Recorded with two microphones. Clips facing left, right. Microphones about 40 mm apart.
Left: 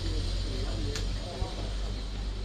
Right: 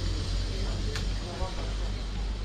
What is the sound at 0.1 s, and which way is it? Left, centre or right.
Vehicle, centre.